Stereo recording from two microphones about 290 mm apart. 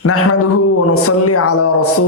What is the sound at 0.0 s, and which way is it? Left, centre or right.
Speech, left.